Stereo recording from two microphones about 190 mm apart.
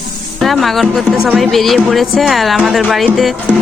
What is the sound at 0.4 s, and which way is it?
Speech, centre (ahead or behind).